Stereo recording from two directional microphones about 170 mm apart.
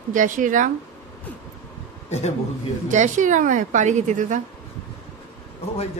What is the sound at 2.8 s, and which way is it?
Speech, 45° right (ahead or behind).